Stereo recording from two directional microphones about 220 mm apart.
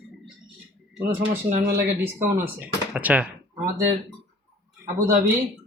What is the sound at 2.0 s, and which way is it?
Speech, 10° right (ahead or behind).